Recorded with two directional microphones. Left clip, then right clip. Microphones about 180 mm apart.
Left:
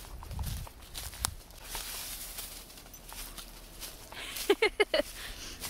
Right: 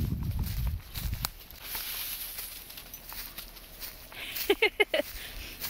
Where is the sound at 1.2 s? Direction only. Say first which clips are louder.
Even; 20° right (ahead or behind).